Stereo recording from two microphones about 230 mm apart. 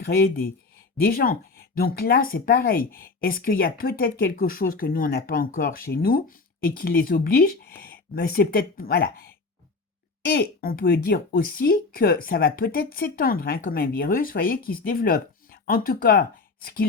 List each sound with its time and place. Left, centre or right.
0.0 s speech: left